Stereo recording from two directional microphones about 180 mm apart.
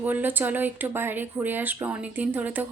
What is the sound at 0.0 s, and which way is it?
Speech, 10° right (ahead or behind).